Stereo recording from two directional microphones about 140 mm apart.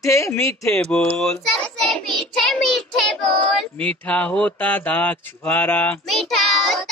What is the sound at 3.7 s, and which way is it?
Mantra, 10° left (ahead or behind).